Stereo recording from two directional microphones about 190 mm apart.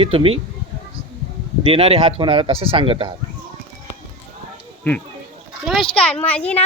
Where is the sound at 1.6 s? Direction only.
30° right (ahead or behind).